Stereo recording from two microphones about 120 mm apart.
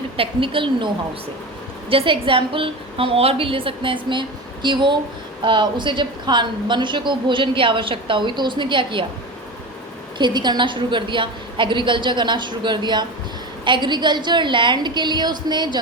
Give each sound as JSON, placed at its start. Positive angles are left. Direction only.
{"t": 0.2, "sound": "a woman's voice", "side_deg": -45}
{"t": 1.9, "sound": "a woman's voice", "side_deg": -50}
{"t": 10.2, "sound": "a woman's voice", "side_deg": -40}